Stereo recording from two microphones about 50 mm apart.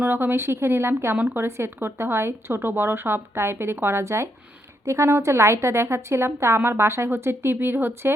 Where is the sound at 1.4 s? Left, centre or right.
Right.